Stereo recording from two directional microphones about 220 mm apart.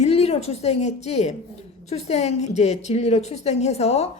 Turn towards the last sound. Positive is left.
turn(degrees=30)  # may be behind; listen again after turning